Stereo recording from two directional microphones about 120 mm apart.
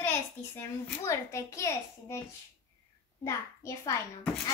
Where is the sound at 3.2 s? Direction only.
25° left (ahead or behind).